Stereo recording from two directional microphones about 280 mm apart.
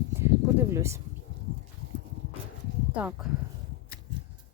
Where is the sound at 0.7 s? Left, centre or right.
Centre.